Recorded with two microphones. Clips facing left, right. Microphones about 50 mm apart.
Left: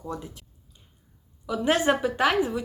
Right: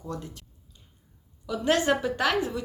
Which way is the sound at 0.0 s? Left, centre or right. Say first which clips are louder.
Left 1 dB; centre.